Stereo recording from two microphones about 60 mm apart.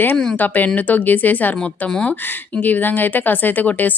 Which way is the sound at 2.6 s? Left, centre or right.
Left.